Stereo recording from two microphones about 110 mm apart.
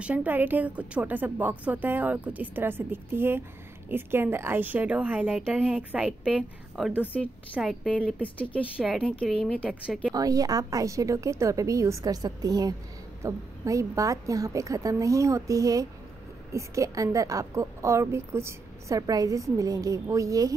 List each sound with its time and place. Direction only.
0.0 s a woman's voice: 15° right (ahead or behind)
6.8 s a woman's voice: centre (ahead or behind)
8.8 s a woman's voice: 5° right (ahead or behind)
9.2 s speech: 5° left (ahead or behind)
10.1 s a woman's voice: 35° right (ahead or behind)